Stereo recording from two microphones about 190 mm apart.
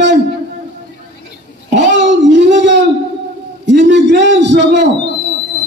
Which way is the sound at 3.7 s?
70° right (ahead or behind).